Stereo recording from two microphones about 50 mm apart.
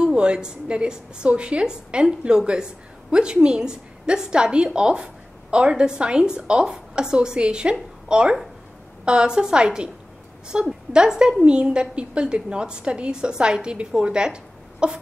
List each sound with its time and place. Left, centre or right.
0.0 s a woman's voice: centre